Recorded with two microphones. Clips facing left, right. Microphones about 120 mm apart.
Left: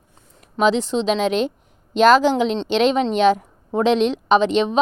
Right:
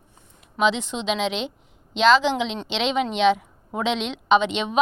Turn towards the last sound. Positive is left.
turn(degrees=35)  # may be behind; listen again after turning